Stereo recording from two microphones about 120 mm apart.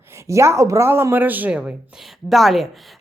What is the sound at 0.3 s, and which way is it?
Speech, 25° right (ahead or behind).